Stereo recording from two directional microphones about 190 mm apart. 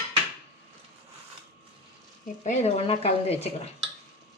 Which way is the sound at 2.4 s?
35° left (ahead or behind).